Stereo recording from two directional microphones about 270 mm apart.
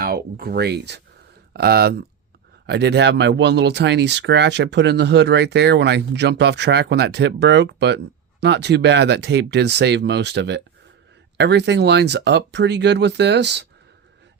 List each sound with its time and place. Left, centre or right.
0.0 s speech: right